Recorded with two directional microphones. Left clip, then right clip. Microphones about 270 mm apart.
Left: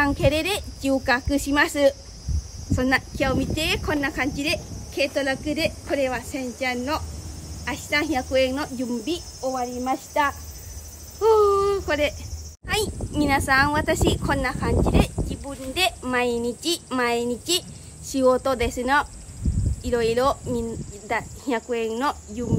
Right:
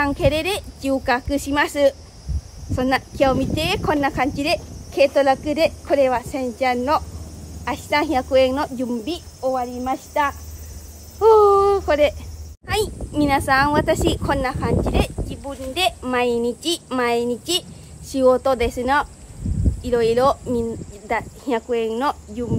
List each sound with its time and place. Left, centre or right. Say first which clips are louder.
0.0 s a child's voice: right 2 dB; centre